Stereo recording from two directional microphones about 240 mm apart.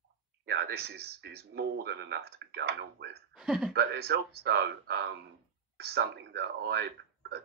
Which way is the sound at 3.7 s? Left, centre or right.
Right.